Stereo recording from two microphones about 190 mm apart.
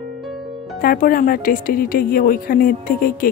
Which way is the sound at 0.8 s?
50° left (ahead or behind).